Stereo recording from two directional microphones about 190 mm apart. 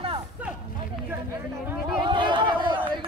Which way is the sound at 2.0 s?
25° right (ahead or behind).